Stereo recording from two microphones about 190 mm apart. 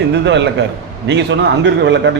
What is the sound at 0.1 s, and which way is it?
A man's voice, 65° right (ahead or behind).